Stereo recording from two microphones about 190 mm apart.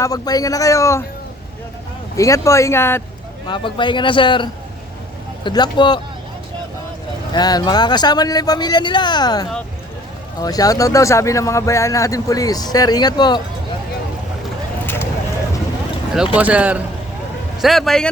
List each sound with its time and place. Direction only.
0.0 s speech: 20° left (ahead or behind)
2.1 s speech: 15° left (ahead or behind)
3.4 s speech: 25° left (ahead or behind)
7.3 s speech: 20° left (ahead or behind)
16.1 s a man's voice: 5° right (ahead or behind)